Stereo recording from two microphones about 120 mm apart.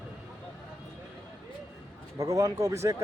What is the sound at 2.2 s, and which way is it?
Speech, 30° right (ahead or behind).